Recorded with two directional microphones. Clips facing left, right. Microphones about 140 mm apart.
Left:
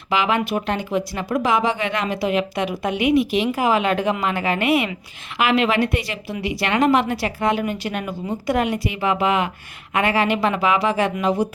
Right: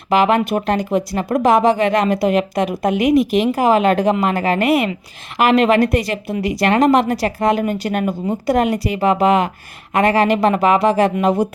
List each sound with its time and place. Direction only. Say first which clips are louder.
0.1 s speech: right 6 dB; 45° right (ahead or behind)